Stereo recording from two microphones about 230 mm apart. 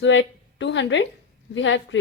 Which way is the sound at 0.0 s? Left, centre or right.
Left.